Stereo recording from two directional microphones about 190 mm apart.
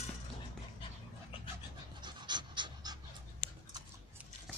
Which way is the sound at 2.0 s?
25° right (ahead or behind).